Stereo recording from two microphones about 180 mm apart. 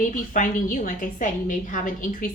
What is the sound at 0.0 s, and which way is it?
A woman's voice, 45° left (ahead or behind).